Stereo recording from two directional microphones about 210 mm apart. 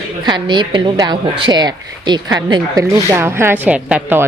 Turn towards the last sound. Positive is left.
turn(degrees=-10)  # may be behind; listen again after turning